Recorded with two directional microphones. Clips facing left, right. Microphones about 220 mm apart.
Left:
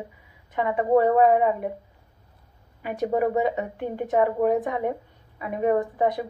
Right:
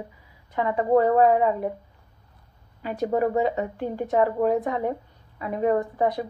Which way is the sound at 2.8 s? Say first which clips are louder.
Even; 20° left (ahead or behind).